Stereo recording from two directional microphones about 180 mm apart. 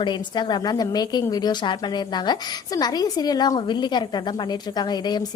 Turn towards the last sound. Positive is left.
turn(degrees=25)  # may be behind; listen again after turning